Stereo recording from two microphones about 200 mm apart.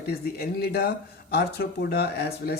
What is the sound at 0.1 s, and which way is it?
Speech, 50° left (ahead or behind).